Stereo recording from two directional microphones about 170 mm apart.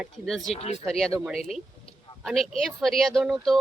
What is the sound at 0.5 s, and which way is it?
Speech, 35° left (ahead or behind).